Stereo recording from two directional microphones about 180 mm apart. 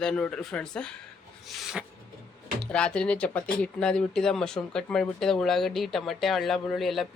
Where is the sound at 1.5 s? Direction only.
Centre (ahead or behind).